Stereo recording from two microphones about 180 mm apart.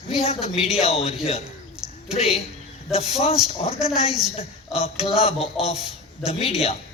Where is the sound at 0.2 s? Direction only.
35° left (ahead or behind).